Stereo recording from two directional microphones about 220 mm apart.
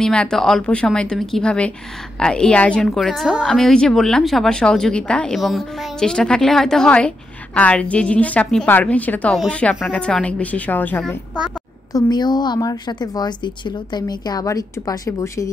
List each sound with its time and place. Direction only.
0.0 s a woman's voice: 5° left (ahead or behind)
11.9 s a woman's voice: 20° left (ahead or behind)